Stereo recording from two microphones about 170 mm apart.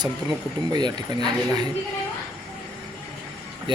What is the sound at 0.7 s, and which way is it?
Speech, 25° right (ahead or behind).